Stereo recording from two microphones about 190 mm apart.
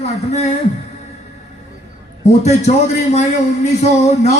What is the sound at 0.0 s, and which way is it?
Speech, 35° left (ahead or behind).